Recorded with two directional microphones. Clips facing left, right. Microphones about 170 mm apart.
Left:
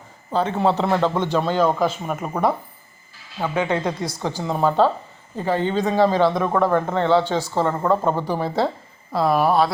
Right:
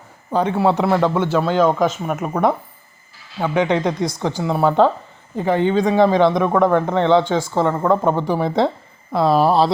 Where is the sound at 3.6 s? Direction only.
15° right (ahead or behind).